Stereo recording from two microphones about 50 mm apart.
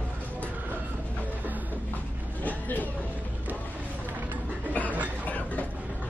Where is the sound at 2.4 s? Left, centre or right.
Left.